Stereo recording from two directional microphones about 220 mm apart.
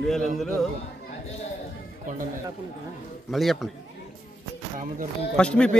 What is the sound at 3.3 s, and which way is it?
Speech, centre (ahead or behind).